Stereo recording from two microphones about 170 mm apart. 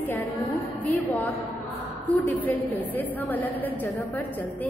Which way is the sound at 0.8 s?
10° left (ahead or behind).